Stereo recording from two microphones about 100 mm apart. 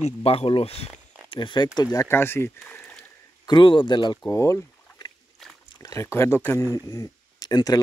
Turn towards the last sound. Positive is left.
turn(degrees=40)  # may be behind; listen again after turning